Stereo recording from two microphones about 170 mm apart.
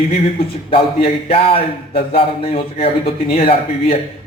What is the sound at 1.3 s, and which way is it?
Speech, 35° left (ahead or behind).